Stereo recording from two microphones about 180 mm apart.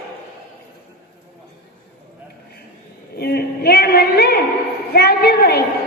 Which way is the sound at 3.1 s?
60° left (ahead or behind).